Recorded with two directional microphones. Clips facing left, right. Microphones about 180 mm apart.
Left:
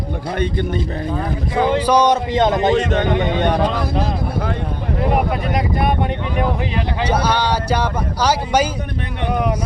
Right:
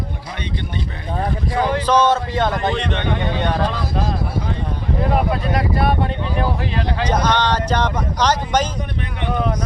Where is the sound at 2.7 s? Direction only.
45° left (ahead or behind).